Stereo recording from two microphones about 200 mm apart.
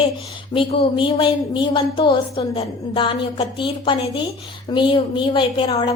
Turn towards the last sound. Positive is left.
turn(degrees=25)  # may be behind; listen again after turning